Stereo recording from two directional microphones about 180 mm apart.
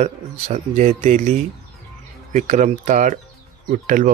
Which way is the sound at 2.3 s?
40° right (ahead or behind).